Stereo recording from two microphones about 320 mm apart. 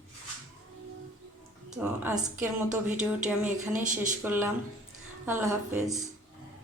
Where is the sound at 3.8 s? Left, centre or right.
Right.